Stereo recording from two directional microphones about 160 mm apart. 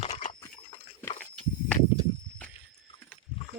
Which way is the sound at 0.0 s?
45° left (ahead or behind).